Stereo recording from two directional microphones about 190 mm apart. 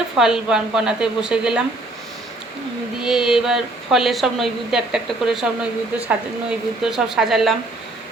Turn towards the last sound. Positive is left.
turn(degrees=0)  # may be behind; listen again after turning